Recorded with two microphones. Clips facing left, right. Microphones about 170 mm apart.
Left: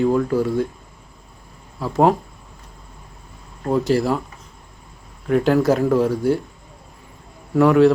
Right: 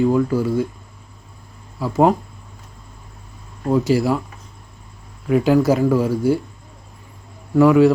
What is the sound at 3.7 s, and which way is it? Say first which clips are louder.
Speech: right 1 dB; centre (ahead or behind).